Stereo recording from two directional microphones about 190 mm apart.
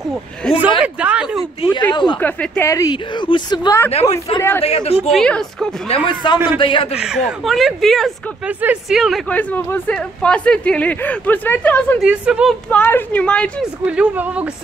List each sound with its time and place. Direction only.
0.6 s speech: 5° right (ahead or behind)
1.6 s speech: 25° left (ahead or behind)
2.1 s speech: 5° left (ahead or behind)
2.7 s speech: 20° left (ahead or behind)
3.9 s speech: 35° left (ahead or behind)
5.1 s a woman's voice: 5° left (ahead or behind)
5.9 s speech: 25° left (ahead or behind)
7.0 s speech: 5° right (ahead or behind)
12.0 s a woman's voice: 5° right (ahead or behind)
13.8 s speech: 5° right (ahead or behind)